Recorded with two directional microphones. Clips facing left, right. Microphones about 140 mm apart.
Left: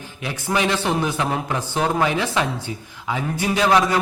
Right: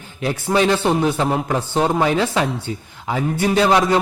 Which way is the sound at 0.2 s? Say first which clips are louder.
Right 5 dB; 35° right (ahead or behind).